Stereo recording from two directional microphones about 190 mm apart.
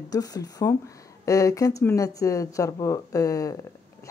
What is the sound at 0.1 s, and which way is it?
Speech, 20° left (ahead or behind).